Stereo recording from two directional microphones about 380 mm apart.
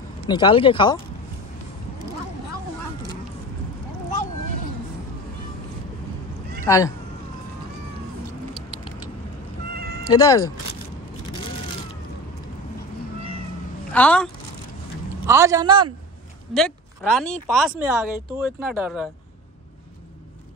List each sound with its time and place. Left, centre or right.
0.3 s speech: centre
6.6 s speech: centre
8.5 s keys jangling: centre
9.8 s cat: right
10.0 s speech: centre
13.9 s speech: centre
15.2 s a man's voice: centre
16.5 s speech: centre